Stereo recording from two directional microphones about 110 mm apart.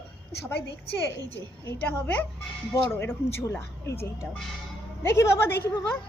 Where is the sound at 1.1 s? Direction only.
20° left (ahead or behind).